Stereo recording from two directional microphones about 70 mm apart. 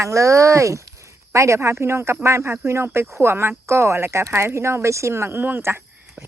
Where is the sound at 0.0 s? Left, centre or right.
Right.